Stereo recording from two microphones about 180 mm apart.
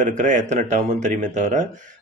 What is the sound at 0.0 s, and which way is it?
A man's voice, 45° right (ahead or behind).